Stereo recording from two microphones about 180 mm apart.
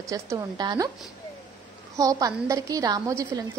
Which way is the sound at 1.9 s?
20° right (ahead or behind).